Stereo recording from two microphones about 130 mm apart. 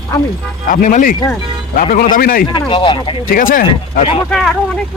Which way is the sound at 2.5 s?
35° left (ahead or behind).